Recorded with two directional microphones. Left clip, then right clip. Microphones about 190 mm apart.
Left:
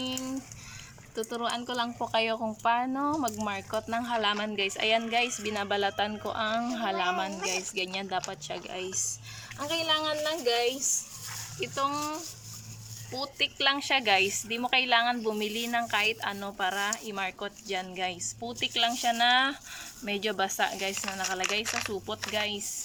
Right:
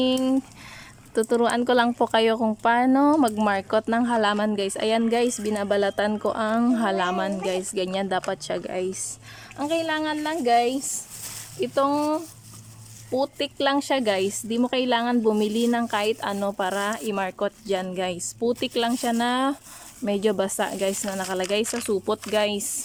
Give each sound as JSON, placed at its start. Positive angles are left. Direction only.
{"t": 0.0, "sound": "speech", "side_deg": -45}
{"t": 11.6, "sound": "speech", "side_deg": -40}
{"t": 21.6, "sound": "speech", "side_deg": -5}
{"t": 22.3, "sound": "speech", "side_deg": -45}